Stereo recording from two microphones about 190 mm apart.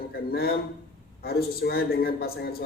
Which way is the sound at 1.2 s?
55° left (ahead or behind).